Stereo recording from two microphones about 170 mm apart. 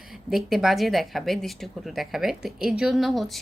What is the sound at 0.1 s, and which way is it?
A woman's voice, centre (ahead or behind).